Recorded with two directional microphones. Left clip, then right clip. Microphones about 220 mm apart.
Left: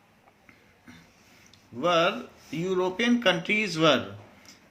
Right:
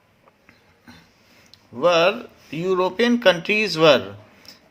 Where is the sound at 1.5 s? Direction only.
40° right (ahead or behind).